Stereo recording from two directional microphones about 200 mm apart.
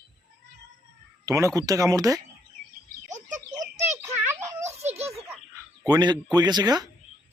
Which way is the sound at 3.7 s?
35° right (ahead or behind).